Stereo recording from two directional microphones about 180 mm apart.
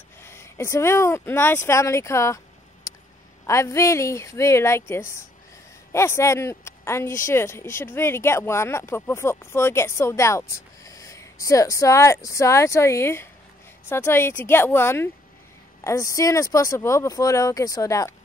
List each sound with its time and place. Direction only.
0.2 s speech: 15° left (ahead or behind)